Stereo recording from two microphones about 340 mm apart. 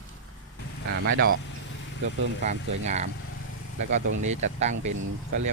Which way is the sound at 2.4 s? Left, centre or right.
Centre.